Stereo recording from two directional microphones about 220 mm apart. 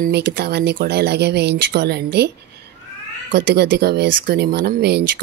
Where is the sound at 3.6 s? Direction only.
50° right (ahead or behind).